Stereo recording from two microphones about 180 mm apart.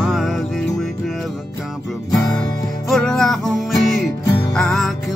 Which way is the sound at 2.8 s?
5° left (ahead or behind).